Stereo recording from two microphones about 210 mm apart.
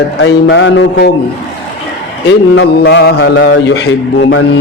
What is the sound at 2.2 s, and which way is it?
A man's voice, 55° left (ahead or behind).